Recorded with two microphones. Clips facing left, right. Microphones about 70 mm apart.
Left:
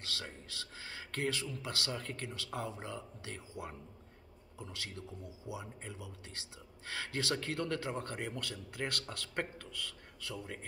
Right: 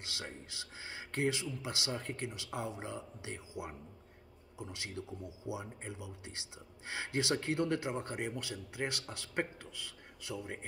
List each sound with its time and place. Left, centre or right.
0.0 s a man's voice: centre